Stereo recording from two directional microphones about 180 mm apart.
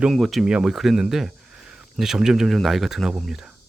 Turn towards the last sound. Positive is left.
turn(degrees=0)  # may be behind; listen again after turning